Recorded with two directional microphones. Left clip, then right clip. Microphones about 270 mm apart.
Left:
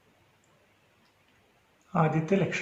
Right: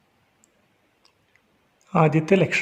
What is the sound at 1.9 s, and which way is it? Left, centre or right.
Speech, right.